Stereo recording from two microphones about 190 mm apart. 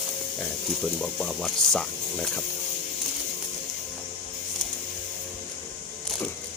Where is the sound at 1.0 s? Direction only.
Centre (ahead or behind).